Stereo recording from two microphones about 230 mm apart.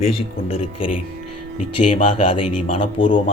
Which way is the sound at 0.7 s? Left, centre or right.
Left.